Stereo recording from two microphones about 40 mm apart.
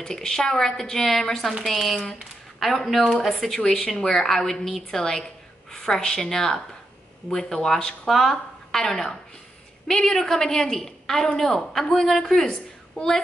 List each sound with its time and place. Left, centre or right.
0.0 s a woman's voice: centre
8.1 s a woman's voice: centre